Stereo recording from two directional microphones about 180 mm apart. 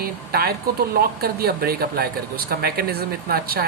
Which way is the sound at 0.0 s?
60° right (ahead or behind).